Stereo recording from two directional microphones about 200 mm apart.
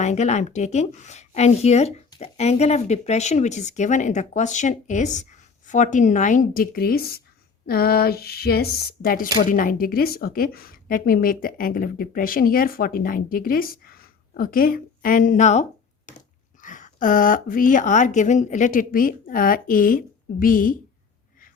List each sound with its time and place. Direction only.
0.0 s speech: 35° left (ahead or behind)
16.1 s a sound: 40° left (ahead or behind)
16.6 s speech: 40° left (ahead or behind)